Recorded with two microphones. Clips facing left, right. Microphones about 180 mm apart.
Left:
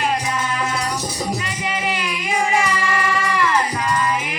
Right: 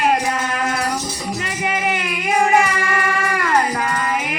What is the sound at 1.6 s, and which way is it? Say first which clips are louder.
Music: right 3 dB; 55° right (ahead or behind).